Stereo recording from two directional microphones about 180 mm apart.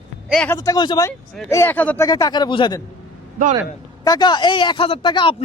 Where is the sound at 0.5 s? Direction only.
20° left (ahead or behind).